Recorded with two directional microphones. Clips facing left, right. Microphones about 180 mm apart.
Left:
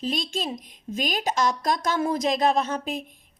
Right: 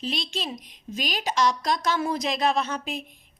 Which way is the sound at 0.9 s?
50° left (ahead or behind).